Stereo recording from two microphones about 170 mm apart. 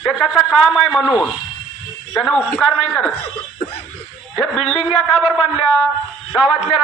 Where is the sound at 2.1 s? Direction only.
5° left (ahead or behind).